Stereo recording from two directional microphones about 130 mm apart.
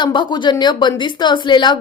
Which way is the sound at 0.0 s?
35° left (ahead or behind).